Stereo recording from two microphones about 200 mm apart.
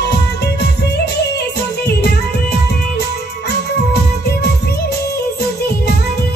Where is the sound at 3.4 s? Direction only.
55° left (ahead or behind).